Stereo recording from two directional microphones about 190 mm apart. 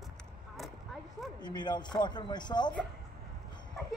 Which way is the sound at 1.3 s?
20° left (ahead or behind).